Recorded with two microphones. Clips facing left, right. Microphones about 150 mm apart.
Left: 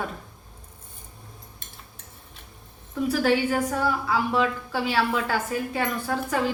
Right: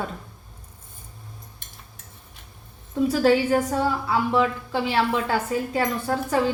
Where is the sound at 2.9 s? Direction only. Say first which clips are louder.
Right 3 dB; 25° right (ahead or behind).